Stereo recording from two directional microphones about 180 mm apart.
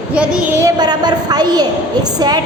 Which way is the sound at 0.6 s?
20° right (ahead or behind).